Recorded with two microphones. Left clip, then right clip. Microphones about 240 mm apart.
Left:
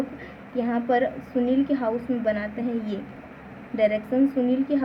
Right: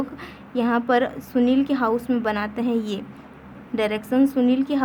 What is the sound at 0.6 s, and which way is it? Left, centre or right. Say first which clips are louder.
A woman's voice: right 3 dB; right.